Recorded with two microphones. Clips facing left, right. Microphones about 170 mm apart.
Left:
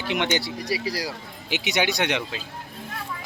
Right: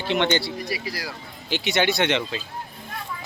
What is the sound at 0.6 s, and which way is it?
Speech, 35° left (ahead or behind).